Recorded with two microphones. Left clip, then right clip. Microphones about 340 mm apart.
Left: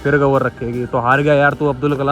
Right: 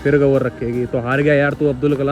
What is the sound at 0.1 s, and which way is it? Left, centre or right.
A man's voice, centre.